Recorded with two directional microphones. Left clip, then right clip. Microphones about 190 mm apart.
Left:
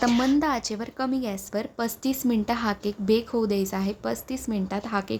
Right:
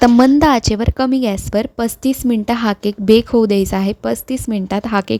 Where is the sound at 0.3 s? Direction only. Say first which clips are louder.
Right 13 dB; 50° right (ahead or behind).